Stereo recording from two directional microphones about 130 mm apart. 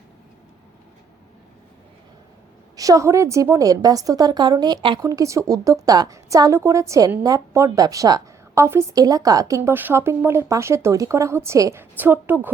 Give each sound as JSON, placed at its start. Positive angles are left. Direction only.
{"t": 2.7, "sound": "a woman's voice", "side_deg": -25}
{"t": 5.0, "sound": "a woman's voice", "side_deg": -25}